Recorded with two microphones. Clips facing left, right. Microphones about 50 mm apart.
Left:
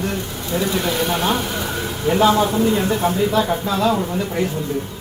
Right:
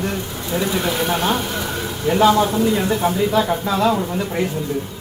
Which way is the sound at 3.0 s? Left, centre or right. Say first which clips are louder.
Even; right.